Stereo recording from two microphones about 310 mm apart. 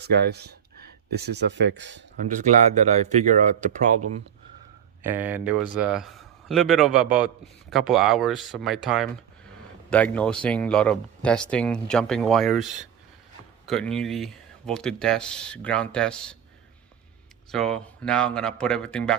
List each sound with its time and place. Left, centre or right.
0.0 s speech: right
2.2 s speech: right
5.0 s a man's voice: centre
17.5 s a man's voice: centre